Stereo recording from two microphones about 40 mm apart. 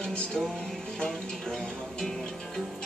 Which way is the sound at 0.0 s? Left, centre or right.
Centre.